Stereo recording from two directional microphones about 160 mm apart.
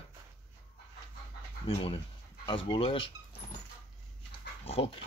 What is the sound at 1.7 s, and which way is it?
Speech, 35° left (ahead or behind).